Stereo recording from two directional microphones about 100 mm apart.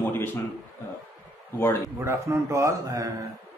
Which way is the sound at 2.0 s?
25° right (ahead or behind).